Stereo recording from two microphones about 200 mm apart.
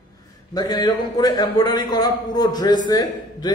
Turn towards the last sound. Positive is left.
turn(degrees=20)  # may be behind; listen again after turning